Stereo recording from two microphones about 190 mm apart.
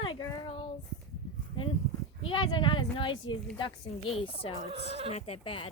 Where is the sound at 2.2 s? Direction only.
25° left (ahead or behind).